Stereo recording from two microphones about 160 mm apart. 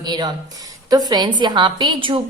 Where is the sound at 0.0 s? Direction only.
25° right (ahead or behind).